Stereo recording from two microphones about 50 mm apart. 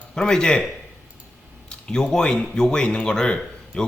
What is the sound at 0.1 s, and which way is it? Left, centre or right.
Speech, centre.